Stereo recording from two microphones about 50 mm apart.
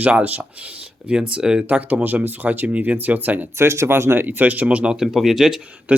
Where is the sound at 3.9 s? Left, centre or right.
Right.